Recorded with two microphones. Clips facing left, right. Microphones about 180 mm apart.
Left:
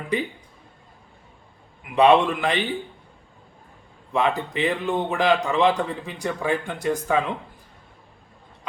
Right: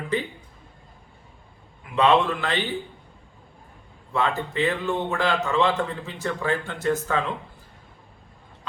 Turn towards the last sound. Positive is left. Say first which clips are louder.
# left 2 dB
turn(degrees=15)  # may be behind; listen again after turning